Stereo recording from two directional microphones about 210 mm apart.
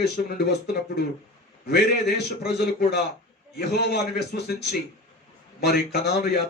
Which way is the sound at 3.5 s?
50° left (ahead or behind).